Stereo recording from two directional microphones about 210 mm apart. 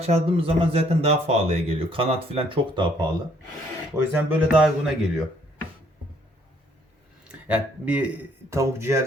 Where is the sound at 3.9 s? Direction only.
10° right (ahead or behind).